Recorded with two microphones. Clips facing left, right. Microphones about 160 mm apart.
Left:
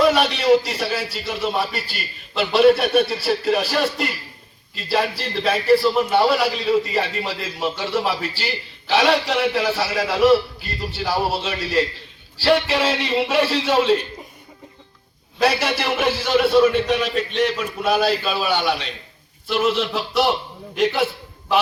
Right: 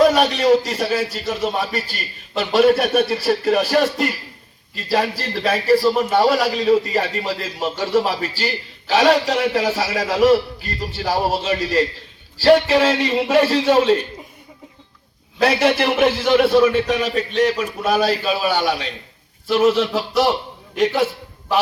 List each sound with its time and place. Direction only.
0.0 s a man's voice: 45° right (ahead or behind)
15.4 s a man's voice: 50° right (ahead or behind)